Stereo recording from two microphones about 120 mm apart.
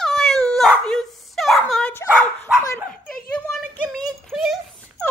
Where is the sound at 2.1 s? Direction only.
5° right (ahead or behind).